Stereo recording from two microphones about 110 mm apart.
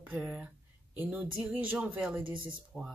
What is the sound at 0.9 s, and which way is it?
Speech, 10° right (ahead or behind).